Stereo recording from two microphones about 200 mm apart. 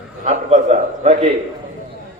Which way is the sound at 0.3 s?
35° right (ahead or behind).